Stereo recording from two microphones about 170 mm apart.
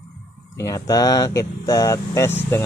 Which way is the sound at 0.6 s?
20° left (ahead or behind).